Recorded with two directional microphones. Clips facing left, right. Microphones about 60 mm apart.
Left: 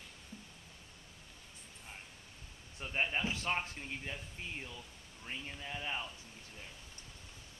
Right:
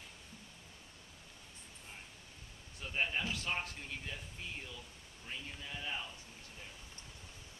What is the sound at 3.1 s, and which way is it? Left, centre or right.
A man's voice, left.